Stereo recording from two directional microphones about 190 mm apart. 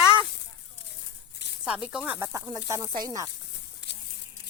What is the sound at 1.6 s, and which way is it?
Speech, 5° right (ahead or behind).